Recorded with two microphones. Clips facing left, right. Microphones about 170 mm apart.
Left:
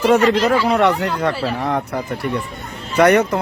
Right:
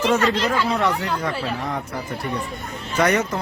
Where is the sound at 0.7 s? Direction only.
70° left (ahead or behind).